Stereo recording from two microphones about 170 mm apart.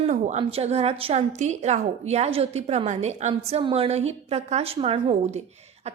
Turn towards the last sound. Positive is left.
turn(degrees=-35)  # may be behind; listen again after turning